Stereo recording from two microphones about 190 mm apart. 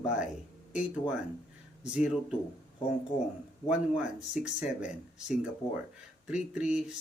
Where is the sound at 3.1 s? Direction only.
40° left (ahead or behind).